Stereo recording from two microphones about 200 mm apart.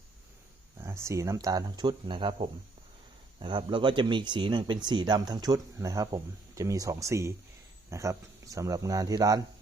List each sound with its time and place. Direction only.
0.8 s speech: 15° right (ahead or behind)